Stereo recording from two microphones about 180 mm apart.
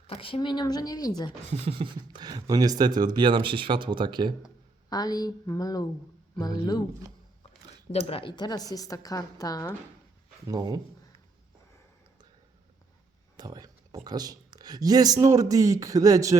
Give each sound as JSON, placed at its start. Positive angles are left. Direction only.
{"t": 0.1, "sound": "a woman's voice", "side_deg": 30}
{"t": 1.5, "sound": "speech", "side_deg": -30}
{"t": 4.9, "sound": "a woman's voice", "side_deg": 20}
{"t": 7.9, "sound": "a woman's voice", "side_deg": 30}
{"t": 10.4, "sound": "speech", "side_deg": -20}
{"t": 13.3, "sound": "speech", "side_deg": -20}